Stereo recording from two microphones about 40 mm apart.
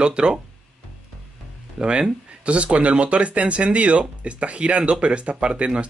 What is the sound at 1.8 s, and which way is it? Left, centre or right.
Speech, right.